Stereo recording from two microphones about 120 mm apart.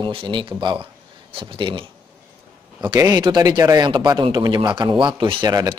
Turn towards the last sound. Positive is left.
turn(degrees=-30)  # may be behind; listen again after turning